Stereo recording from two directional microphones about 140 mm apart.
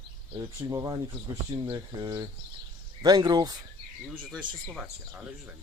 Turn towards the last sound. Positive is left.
turn(degrees=-5)  # may be behind; listen again after turning